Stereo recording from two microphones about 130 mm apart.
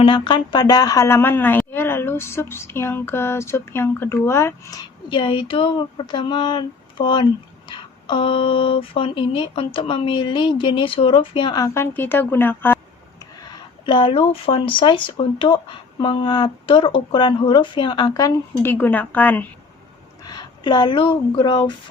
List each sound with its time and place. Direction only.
0.0 s speech: 40° left (ahead or behind)
11.6 s a woman's voice: 20° left (ahead or behind)
13.5 s speech: 40° left (ahead or behind)
18.6 s a woman's voice: 15° left (ahead or behind)
20.2 s speech: 30° left (ahead or behind)